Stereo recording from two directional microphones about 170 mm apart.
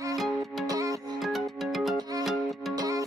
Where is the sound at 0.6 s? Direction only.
20° right (ahead or behind).